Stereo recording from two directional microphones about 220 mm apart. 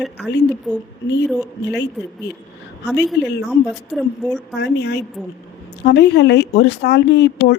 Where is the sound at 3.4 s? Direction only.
Centre (ahead or behind).